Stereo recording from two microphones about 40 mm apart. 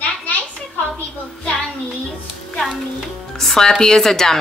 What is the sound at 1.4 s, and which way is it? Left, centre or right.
Child singing, left.